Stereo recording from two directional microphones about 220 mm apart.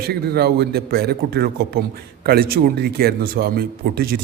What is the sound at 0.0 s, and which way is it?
Speech, 45° right (ahead or behind).